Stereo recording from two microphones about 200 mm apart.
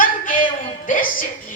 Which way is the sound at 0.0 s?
40° left (ahead or behind).